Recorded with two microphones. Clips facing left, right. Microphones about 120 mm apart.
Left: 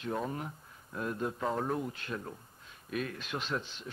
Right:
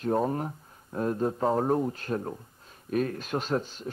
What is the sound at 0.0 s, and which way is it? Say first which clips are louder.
Speech: right 9 dB; 45° right (ahead or behind).